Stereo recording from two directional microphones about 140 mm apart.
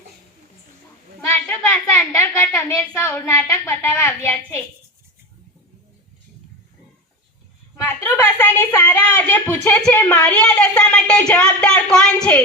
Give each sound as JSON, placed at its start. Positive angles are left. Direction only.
{"t": 1.3, "sound": "a woman's voice", "side_deg": 10}
{"t": 7.9, "sound": "a woman's voice", "side_deg": 15}